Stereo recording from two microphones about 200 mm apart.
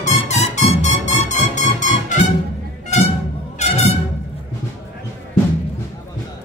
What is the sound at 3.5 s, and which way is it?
Music, 30° left (ahead or behind).